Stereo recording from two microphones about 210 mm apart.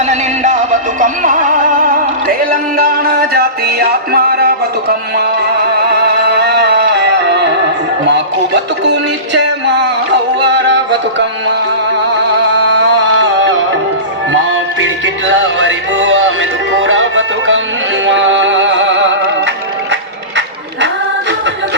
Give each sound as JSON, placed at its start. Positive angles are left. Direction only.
{"t": 0.0, "sound": "music", "side_deg": -35}
{"t": 12.5, "sound": "music", "side_deg": -60}
{"t": 14.8, "sound": "music", "side_deg": -65}